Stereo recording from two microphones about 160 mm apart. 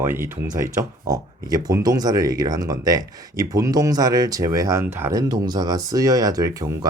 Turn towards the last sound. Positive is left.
turn(degrees=-20)  # may be behind; listen again after turning